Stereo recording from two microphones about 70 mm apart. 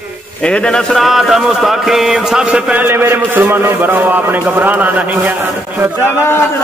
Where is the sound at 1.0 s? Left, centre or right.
Centre.